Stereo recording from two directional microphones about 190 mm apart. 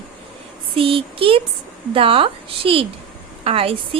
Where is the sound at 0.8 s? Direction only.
30° right (ahead or behind).